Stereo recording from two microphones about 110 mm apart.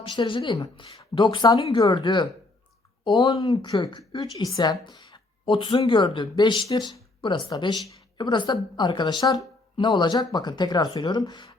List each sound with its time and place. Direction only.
0.1 s speech: 45° left (ahead or behind)
1.5 s speech: 60° left (ahead or behind)
1.8 s speech: 45° left (ahead or behind)